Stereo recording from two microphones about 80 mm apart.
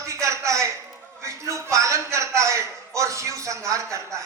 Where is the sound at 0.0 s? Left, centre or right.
Right.